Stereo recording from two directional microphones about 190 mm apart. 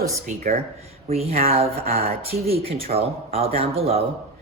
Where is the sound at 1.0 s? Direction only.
35° right (ahead or behind).